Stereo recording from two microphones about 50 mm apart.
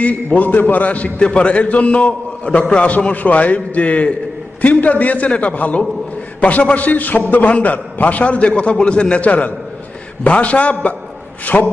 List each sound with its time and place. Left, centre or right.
0.0 s a man's voice: left